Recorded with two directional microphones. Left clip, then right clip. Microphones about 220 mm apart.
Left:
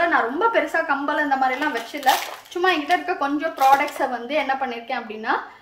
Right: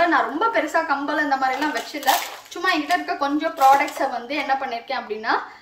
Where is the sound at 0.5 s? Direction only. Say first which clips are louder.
Even; 15° left (ahead or behind).